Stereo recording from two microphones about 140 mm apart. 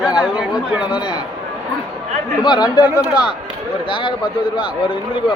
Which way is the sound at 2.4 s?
30° left (ahead or behind).